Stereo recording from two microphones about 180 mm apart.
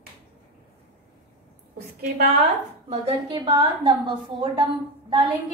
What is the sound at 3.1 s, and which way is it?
A woman's voice, 25° right (ahead or behind).